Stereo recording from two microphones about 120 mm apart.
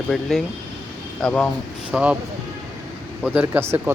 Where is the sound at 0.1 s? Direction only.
Centre (ahead or behind).